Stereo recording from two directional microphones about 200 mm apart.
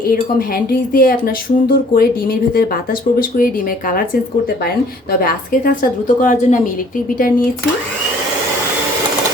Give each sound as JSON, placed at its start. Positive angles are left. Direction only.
{"t": 0.1, "sound": "speech", "side_deg": 45}
{"t": 3.2, "sound": "speech", "side_deg": 45}
{"t": 5.2, "sound": "a woman's voice", "side_deg": 45}